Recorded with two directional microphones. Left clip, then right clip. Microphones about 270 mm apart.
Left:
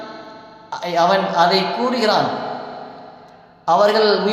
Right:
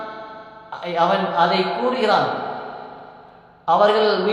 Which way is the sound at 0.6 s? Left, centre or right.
Left.